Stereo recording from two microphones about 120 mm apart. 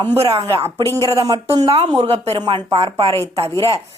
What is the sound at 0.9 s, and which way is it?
Speech, 25° left (ahead or behind).